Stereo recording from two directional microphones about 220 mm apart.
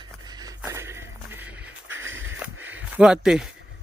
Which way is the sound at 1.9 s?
60° right (ahead or behind).